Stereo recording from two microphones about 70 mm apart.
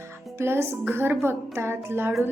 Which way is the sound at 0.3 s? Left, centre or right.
Right.